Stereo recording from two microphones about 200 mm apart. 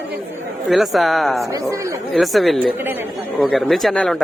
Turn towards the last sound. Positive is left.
turn(degrees=5)  # may be behind; listen again after turning